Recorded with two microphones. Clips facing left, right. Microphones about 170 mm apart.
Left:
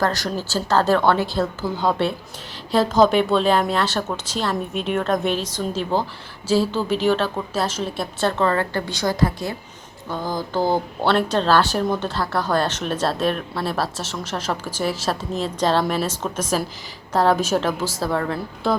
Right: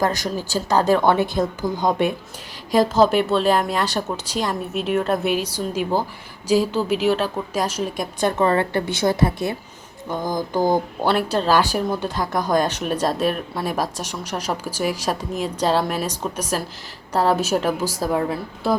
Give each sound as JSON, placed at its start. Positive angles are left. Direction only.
{"t": 0.0, "sound": "speech", "side_deg": -15}